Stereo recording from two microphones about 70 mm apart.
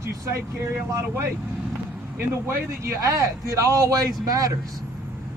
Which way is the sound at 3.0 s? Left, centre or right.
Right.